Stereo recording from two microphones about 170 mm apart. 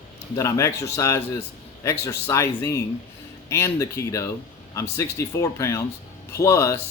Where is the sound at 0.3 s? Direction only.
20° left (ahead or behind).